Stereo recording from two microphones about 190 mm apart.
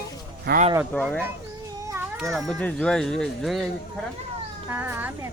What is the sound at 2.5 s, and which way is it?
Speech, 5° left (ahead or behind).